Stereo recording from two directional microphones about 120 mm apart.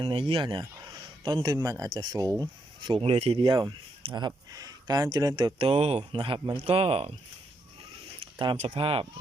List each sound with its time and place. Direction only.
0.0 s speech: 50° right (ahead or behind)
0.4 s speech: 35° right (ahead or behind)
3.0 s speech: 55° right (ahead or behind)
3.4 s speech: 35° right (ahead or behind)
5.5 s speech: 55° right (ahead or behind)
6.0 s speech: 45° right (ahead or behind)
8.5 s speech: 55° right (ahead or behind)